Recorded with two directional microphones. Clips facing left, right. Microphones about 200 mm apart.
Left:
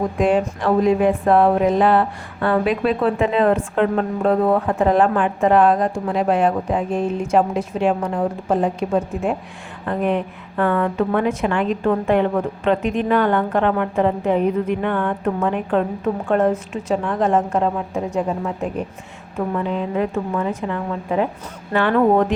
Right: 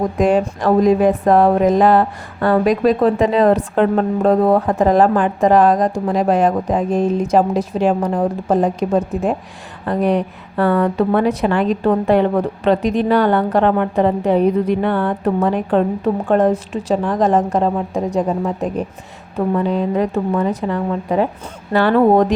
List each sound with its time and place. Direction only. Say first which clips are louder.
0.2 s speech: right 3 dB; 40° right (ahead or behind)